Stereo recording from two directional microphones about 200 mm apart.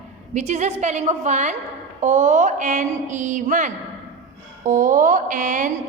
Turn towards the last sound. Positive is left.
turn(degrees=-40)  # may be behind; listen again after turning